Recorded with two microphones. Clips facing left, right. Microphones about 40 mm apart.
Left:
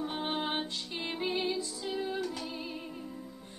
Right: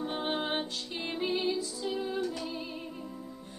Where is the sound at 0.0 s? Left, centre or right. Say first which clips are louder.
Right 1 dB; centre.